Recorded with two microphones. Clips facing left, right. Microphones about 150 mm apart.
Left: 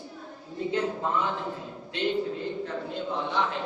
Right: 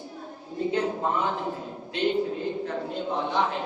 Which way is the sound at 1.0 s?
25° right (ahead or behind).